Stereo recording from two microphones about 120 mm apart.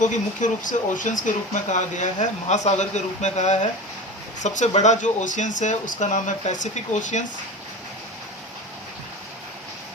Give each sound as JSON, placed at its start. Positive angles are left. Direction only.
{"t": 0.0, "sound": "speech", "side_deg": 90}